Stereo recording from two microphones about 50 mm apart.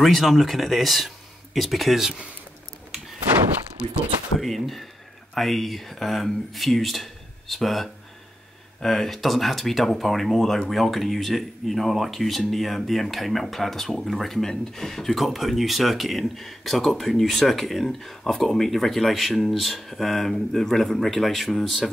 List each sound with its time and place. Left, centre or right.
0.0 s speech: centre
3.8 s speech: right
4.4 s speech: centre